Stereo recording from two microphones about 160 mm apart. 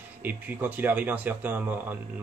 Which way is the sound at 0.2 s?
10° right (ahead or behind).